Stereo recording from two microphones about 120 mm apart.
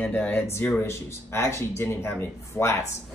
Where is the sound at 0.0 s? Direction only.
10° left (ahead or behind).